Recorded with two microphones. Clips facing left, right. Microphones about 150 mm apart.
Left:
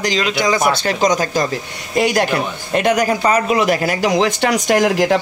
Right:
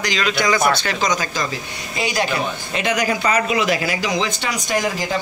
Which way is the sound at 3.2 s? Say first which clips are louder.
Left 4 dB; 35° left (ahead or behind).